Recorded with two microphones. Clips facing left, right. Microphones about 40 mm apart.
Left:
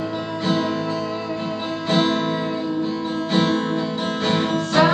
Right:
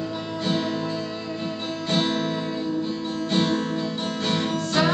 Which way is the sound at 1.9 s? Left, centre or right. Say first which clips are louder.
Left 5 dB; centre.